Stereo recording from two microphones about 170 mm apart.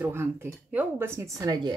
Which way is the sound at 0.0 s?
15° right (ahead or behind).